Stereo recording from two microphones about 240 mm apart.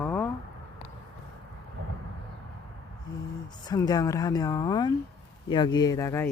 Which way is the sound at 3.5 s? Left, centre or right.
Centre.